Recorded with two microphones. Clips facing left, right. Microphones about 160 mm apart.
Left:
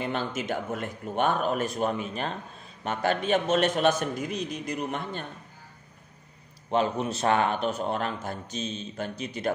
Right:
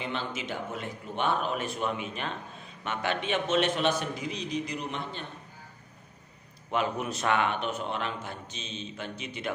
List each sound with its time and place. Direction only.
0.0 s a man's voice: 45° left (ahead or behind)
6.7 s speech: 30° left (ahead or behind)